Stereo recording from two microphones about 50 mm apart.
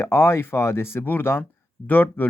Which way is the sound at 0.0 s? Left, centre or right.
Left.